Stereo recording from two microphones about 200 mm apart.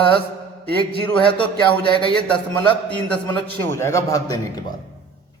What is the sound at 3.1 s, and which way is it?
A man's voice, 10° left (ahead or behind).